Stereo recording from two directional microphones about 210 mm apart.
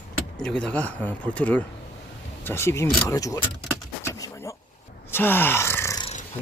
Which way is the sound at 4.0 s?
15° left (ahead or behind).